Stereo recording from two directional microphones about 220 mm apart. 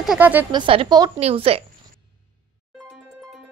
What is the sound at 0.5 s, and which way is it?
Speech, 25° right (ahead or behind).